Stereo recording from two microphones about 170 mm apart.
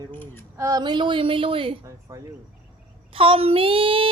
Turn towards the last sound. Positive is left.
turn(degrees=-30)  # may be behind; listen again after turning